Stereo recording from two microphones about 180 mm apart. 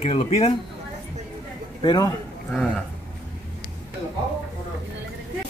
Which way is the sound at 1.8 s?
20° left (ahead or behind).